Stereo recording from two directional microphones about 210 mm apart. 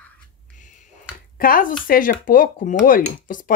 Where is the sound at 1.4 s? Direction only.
40° left (ahead or behind).